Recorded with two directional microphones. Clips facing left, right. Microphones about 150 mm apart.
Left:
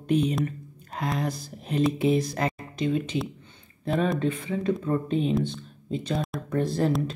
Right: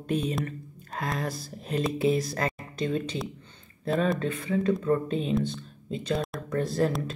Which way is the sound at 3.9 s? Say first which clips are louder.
Even; 5° left (ahead or behind).